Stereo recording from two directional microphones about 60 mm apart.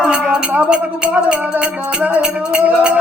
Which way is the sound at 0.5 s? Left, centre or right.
Right.